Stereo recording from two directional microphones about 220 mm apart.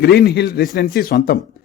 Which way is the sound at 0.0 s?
45° left (ahead or behind).